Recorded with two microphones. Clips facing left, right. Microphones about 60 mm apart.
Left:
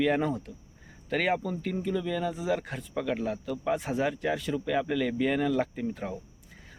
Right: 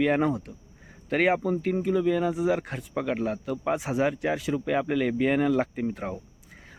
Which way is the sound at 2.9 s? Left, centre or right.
Right.